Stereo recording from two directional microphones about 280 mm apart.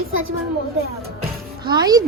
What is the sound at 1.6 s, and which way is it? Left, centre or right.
Speech, centre.